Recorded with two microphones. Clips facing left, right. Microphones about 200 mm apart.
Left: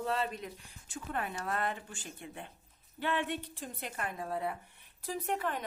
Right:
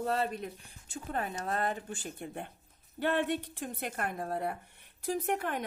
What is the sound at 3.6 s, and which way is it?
A woman's voice, 50° right (ahead or behind).